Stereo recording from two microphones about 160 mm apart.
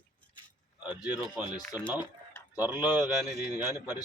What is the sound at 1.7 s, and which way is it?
Speech, 10° right (ahead or behind).